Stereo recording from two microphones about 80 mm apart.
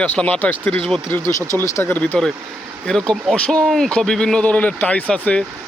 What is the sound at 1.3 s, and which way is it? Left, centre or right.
Speech, left.